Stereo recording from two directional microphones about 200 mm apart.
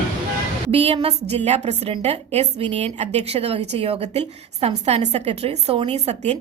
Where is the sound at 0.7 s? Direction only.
30° right (ahead or behind).